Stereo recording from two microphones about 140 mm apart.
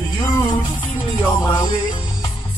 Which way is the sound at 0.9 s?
15° left (ahead or behind).